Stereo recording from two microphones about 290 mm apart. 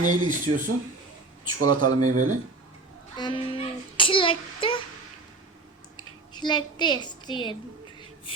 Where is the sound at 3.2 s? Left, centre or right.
Centre.